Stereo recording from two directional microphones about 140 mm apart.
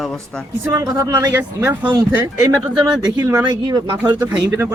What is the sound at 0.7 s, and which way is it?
A man's voice, 25° right (ahead or behind).